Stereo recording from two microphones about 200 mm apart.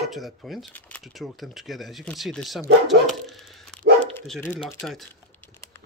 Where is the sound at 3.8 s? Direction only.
55° right (ahead or behind).